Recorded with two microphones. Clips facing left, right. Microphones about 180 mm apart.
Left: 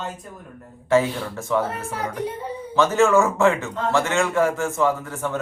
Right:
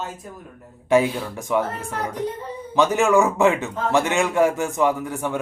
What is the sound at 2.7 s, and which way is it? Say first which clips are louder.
A man's voice: even; 15° right (ahead or behind).